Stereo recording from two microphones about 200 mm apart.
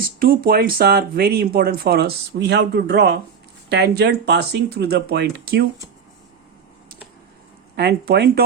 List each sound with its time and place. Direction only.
0.2 s speech: 45° right (ahead or behind)
7.8 s speech: 55° right (ahead or behind)